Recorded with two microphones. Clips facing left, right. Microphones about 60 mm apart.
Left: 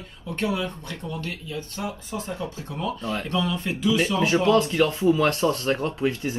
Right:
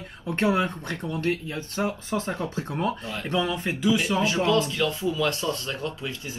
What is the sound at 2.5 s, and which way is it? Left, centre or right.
Speech, right.